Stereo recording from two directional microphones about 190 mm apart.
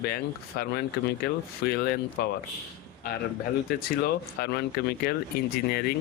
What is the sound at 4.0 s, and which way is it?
Speech, 55° left (ahead or behind).